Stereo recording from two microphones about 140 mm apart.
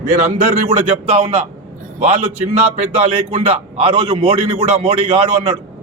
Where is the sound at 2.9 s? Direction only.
45° right (ahead or behind).